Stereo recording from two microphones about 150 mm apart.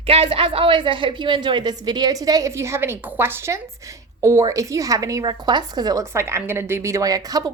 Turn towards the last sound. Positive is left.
turn(degrees=-25)  # may be behind; listen again after turning